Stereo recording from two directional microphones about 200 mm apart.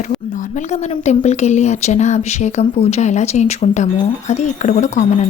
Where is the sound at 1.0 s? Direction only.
35° left (ahead or behind).